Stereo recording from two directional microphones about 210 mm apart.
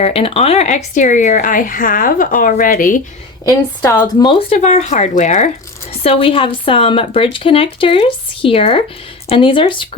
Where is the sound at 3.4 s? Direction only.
20° left (ahead or behind).